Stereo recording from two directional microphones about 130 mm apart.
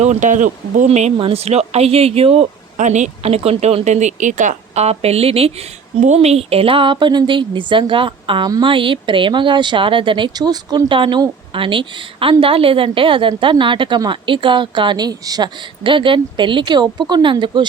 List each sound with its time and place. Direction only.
0.0 s speech: 70° right (ahead or behind)
0.9 s speech: 60° right (ahead or behind)
1.2 s speech: 50° right (ahead or behind)
2.7 s speech: 65° right (ahead or behind); by 17.7 s 35° right (ahead or behind)